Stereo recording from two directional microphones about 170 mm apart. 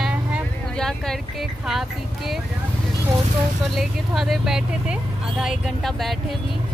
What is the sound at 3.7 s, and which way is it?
Speech, centre (ahead or behind).